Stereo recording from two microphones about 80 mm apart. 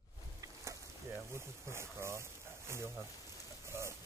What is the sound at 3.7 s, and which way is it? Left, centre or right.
Bird, right.